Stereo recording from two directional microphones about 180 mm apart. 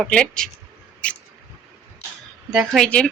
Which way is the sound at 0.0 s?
5° left (ahead or behind).